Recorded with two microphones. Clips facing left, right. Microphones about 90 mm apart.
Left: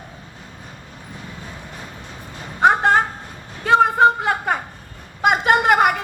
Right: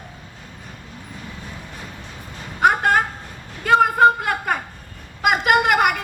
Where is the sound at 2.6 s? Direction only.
25° left (ahead or behind).